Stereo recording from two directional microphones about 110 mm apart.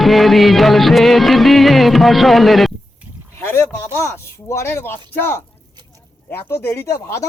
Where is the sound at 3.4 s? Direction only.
20° left (ahead or behind).